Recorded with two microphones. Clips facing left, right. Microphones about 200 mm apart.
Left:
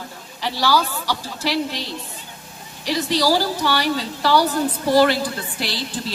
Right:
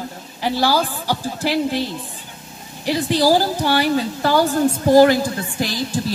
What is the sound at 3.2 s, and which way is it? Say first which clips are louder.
Speech: right 4 dB; 45° right (ahead or behind).